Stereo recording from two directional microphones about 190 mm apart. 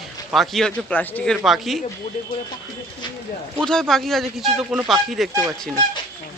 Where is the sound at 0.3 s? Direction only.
Centre (ahead or behind).